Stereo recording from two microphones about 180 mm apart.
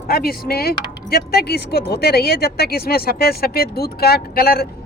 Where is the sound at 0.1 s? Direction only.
60° left (ahead or behind).